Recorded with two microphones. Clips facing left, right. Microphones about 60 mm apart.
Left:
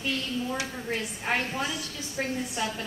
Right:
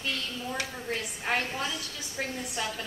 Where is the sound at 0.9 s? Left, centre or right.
Centre.